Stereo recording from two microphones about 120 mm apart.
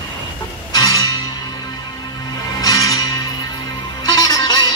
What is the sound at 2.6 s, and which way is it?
Music, 30° left (ahead or behind).